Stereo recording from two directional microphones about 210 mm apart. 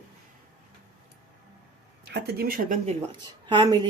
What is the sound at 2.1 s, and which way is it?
Speech, 50° right (ahead or behind).